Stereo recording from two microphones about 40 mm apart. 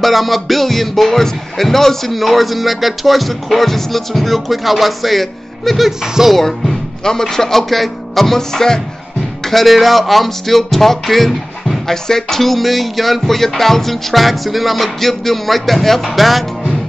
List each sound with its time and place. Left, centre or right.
0.0 s music: centre
5.9 s speech: centre
6.3 s speech: centre
9.5 s music: centre